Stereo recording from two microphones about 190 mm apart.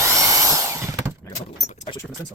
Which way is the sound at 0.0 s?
15° right (ahead or behind).